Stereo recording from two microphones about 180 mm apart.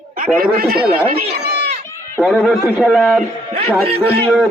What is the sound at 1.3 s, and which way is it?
Run, 65° right (ahead or behind).